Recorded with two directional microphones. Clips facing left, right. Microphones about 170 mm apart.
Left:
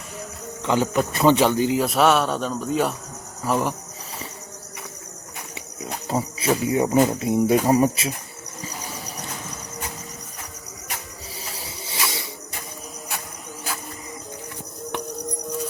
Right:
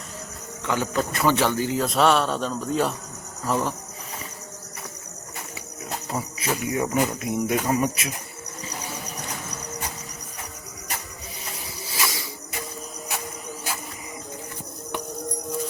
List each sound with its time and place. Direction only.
0.6 s speech: 20° left (ahead or behind); by 2.9 s 5° left (ahead or behind)
3.4 s speech: 15° left (ahead or behind)
5.8 s speech: 30° left (ahead or behind)
11.5 s snake: 30° left (ahead or behind)